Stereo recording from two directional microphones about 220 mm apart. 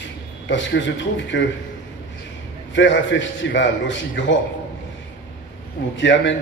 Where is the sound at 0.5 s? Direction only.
55° left (ahead or behind).